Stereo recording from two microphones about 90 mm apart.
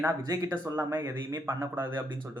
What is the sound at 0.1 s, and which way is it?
Speech, 40° right (ahead or behind).